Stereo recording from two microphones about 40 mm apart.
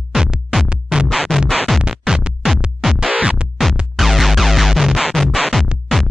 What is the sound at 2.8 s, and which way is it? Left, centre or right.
Music, centre.